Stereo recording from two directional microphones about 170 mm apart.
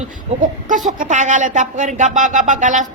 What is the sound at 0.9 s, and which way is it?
Speech, 45° right (ahead or behind).